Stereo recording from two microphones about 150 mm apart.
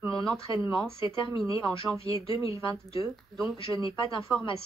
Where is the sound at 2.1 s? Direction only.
20° right (ahead or behind).